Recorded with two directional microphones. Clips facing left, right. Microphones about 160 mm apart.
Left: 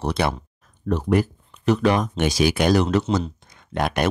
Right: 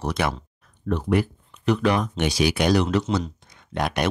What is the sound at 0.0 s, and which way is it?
Speech, 30° left (ahead or behind).